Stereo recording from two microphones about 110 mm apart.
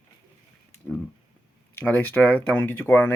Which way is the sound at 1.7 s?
15° left (ahead or behind).